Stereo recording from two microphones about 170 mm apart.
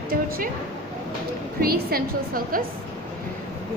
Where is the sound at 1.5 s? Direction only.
60° right (ahead or behind).